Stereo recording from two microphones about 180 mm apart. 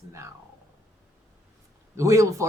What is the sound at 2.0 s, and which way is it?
Speech, 15° right (ahead or behind).